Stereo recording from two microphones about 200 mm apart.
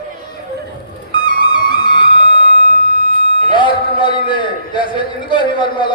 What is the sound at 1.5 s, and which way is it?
Music, 25° left (ahead or behind).